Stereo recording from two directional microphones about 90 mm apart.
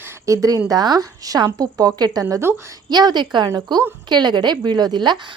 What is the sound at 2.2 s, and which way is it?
Speech, 30° right (ahead or behind).